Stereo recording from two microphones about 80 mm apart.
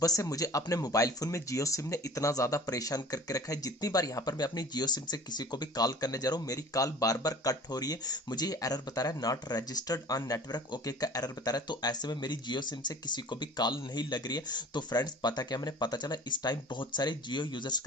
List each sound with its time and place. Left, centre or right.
0.0 s speech: left